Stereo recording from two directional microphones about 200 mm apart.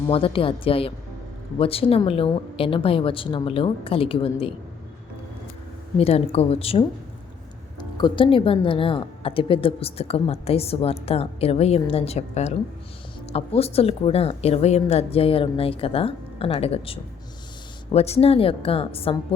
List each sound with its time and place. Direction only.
0.1 s a woman's voice: 25° left (ahead or behind)
6.0 s a woman's voice: 30° left (ahead or behind)
7.9 s a woman's voice: 25° left (ahead or behind)